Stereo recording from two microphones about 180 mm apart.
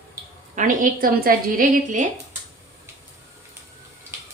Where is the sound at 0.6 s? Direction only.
45° right (ahead or behind).